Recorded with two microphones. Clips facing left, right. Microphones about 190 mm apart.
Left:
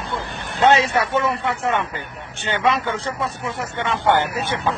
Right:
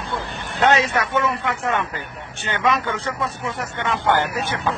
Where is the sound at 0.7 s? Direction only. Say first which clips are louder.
Left 2 dB; 25° left (ahead or behind).